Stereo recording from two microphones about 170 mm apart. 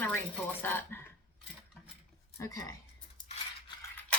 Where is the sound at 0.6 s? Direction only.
10° left (ahead or behind).